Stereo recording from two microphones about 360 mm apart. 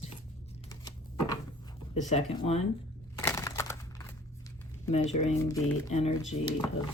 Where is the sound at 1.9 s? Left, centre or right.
Centre.